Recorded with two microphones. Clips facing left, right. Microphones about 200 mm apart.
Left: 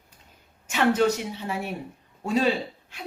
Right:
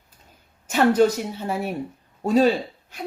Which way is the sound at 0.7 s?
40° right (ahead or behind).